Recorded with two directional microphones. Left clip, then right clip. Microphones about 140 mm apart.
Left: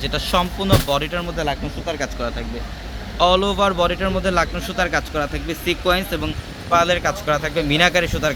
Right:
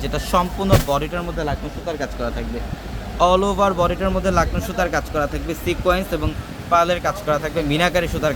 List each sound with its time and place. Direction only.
0.0 s a man's voice: centre (ahead or behind)
1.4 s speech: 25° left (ahead or behind)
3.2 s a man's voice: centre (ahead or behind)